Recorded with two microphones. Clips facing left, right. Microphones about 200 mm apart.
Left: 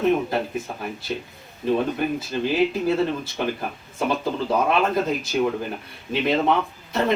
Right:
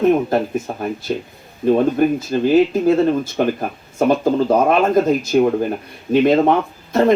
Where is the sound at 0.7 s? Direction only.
40° right (ahead or behind).